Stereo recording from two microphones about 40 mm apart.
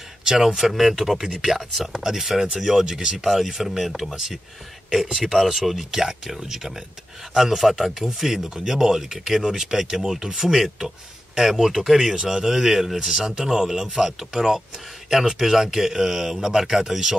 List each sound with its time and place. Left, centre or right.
0.2 s a sound: centre
0.6 s a man's voice: centre
3.3 s speech: centre
5.7 s a man's voice: centre